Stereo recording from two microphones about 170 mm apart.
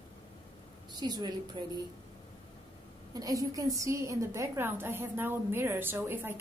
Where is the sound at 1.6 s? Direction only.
30° right (ahead or behind).